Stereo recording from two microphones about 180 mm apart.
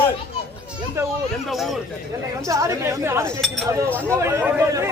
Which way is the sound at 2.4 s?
15° right (ahead or behind).